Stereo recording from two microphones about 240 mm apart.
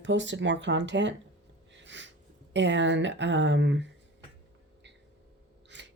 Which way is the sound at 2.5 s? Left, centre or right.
Right.